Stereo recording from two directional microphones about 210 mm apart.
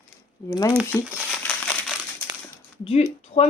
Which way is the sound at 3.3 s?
30° left (ahead or behind).